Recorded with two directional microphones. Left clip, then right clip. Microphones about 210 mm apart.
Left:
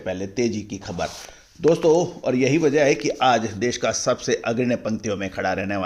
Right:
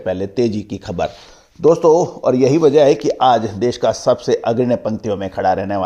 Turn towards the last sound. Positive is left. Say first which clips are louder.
# right 8 dB
turn(degrees=-10)  # may be behind; listen again after turning